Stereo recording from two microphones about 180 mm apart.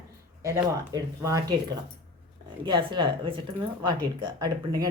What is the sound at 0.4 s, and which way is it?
Speech, 15° right (ahead or behind).